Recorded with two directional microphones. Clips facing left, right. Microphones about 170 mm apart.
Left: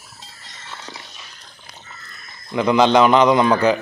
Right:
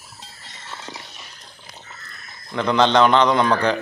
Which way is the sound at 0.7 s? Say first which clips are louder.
Right 1 dB; 10° right (ahead or behind).